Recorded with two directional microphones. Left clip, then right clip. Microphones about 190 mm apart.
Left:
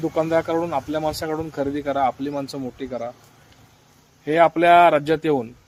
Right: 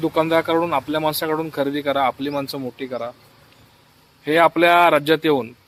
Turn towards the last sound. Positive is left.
turn(degrees=-5)  # may be behind; listen again after turning